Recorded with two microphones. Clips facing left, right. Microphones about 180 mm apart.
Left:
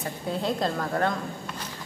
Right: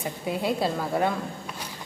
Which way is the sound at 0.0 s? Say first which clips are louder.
Right 1 dB; 10° right (ahead or behind).